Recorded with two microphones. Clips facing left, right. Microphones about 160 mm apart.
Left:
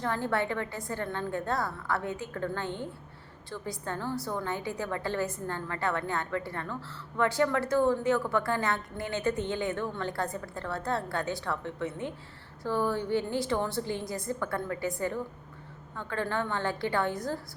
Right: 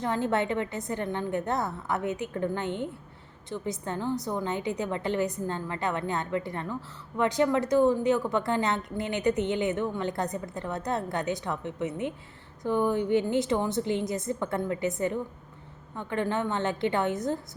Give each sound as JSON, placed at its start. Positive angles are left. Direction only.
{"t": 0.0, "sound": "a woman's voice", "side_deg": -20}